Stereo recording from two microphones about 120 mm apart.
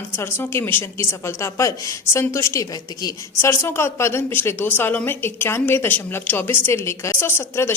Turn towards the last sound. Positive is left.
turn(degrees=20)  # may be behind; listen again after turning